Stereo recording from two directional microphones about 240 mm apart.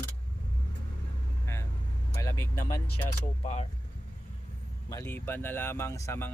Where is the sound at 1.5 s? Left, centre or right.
Centre.